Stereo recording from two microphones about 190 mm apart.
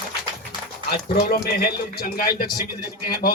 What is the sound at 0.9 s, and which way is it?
A man's voice, 55° left (ahead or behind).